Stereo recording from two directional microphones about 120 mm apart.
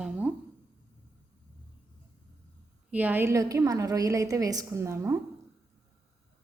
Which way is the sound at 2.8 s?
15° right (ahead or behind).